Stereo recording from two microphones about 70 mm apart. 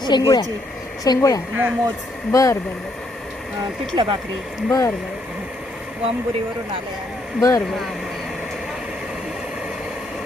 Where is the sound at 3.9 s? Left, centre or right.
Right.